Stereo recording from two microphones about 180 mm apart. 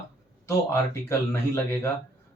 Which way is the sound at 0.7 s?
15° left (ahead or behind).